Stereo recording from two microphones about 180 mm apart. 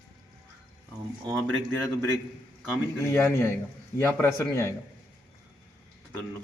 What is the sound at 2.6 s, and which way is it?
Speech, 10° left (ahead or behind).